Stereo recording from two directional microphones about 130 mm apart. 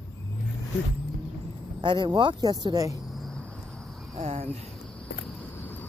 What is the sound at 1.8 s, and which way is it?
A woman's voice, 35° right (ahead or behind).